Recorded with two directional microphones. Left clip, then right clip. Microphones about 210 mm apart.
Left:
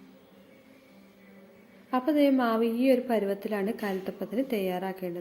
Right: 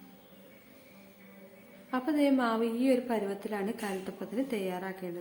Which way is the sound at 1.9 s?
15° left (ahead or behind).